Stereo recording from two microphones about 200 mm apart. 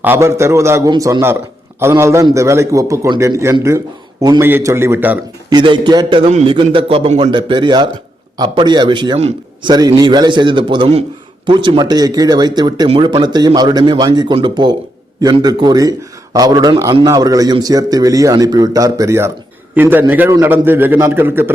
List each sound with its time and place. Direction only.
0.0 s a man's voice: 10° right (ahead or behind)
5.5 s a man's voice: 20° right (ahead or behind)